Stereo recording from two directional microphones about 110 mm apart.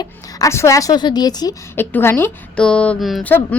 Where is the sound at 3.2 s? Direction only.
15° left (ahead or behind).